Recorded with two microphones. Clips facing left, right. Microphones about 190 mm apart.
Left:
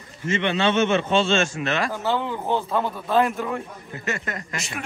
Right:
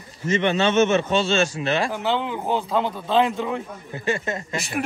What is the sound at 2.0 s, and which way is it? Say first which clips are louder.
A man's voice: right 1 dB; 15° right (ahead or behind).